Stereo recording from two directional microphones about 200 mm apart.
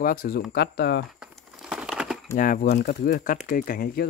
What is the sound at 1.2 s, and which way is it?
Crumpling, 5° right (ahead or behind).